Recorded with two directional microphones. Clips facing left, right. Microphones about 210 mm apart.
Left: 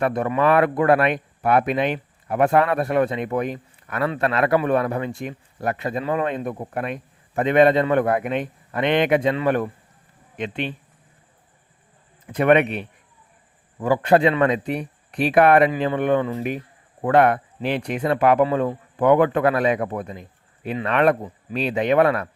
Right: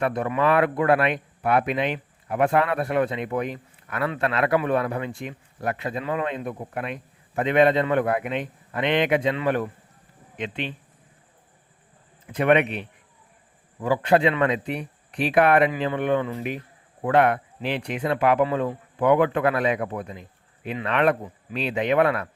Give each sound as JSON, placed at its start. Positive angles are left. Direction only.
{"t": 0.0, "sound": "speech", "side_deg": 45}
{"t": 12.3, "sound": "speech", "side_deg": 45}
{"t": 13.8, "sound": "speech", "side_deg": 45}